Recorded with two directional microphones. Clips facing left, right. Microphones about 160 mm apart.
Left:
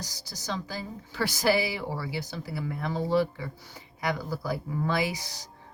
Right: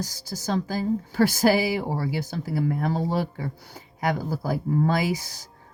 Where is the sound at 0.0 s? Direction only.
50° right (ahead or behind).